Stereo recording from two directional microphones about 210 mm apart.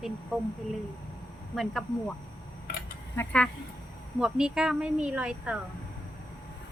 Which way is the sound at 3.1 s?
10° left (ahead or behind).